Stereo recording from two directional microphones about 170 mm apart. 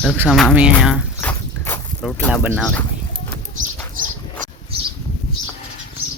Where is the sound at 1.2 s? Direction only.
10° left (ahead or behind).